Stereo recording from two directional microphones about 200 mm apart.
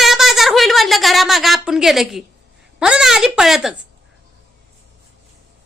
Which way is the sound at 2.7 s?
5° right (ahead or behind).